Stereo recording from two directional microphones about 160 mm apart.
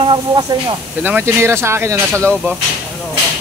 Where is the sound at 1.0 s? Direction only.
15° right (ahead or behind).